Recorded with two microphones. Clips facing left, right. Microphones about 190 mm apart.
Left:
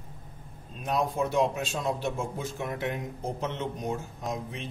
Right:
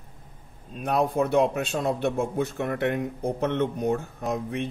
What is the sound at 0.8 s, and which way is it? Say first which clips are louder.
Speech: right 4 dB; 60° right (ahead or behind).